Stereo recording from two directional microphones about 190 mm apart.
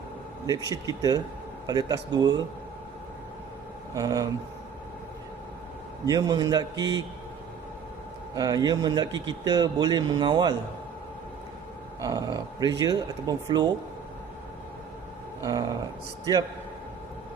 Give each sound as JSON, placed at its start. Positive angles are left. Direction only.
{"t": 0.4, "sound": "a man's voice", "side_deg": -20}
{"t": 3.9, "sound": "a man's voice", "side_deg": -20}
{"t": 6.1, "sound": "a man's voice", "side_deg": -20}
{"t": 8.4, "sound": "a man's voice", "side_deg": -20}
{"t": 11.9, "sound": "a man's voice", "side_deg": -20}
{"t": 16.3, "sound": "a man's voice", "side_deg": -20}